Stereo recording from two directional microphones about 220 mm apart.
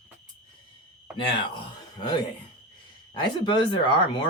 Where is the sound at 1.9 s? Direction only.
20° left (ahead or behind).